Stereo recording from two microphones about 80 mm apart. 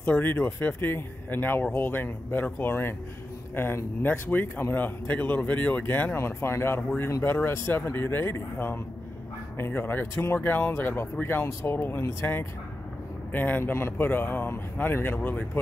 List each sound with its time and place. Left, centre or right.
0.0 s speech: left